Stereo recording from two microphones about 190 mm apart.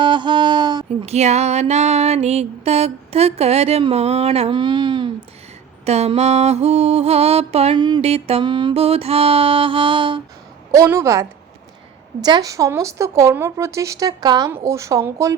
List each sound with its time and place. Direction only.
0.0 s a sound: 25° right (ahead or behind)
1.1 s mantra: 35° right (ahead or behind)
10.7 s a woman's voice: 15° right (ahead or behind)